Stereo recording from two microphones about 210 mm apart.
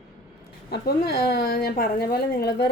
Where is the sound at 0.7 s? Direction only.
50° left (ahead or behind).